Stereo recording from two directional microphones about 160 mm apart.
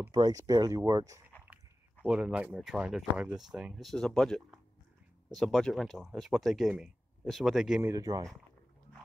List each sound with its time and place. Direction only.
0.0 s speech: 25° right (ahead or behind)
2.0 s speech: 5° right (ahead or behind)
7.8 s speech: 20° right (ahead or behind)